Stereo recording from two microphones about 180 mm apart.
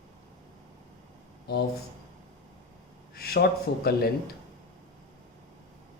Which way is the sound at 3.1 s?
60° left (ahead or behind).